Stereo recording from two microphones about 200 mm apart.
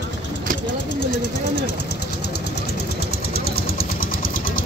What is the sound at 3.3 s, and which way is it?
Vehicle, 50° left (ahead or behind).